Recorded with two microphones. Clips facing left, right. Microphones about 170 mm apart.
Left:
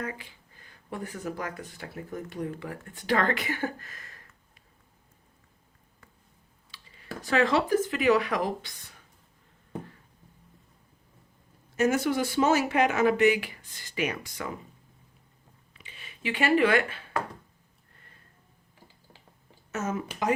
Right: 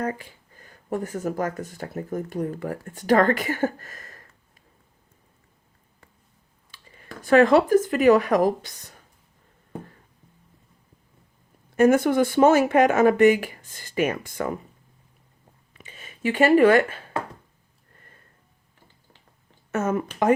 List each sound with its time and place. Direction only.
0.0 s speech: 45° right (ahead or behind)
6.7 s a sound: 50° right (ahead or behind)
7.2 s speech: 50° right (ahead or behind)
11.8 s speech: 55° right (ahead or behind)
15.8 s speech: 45° right (ahead or behind)
19.7 s speech: 55° right (ahead or behind)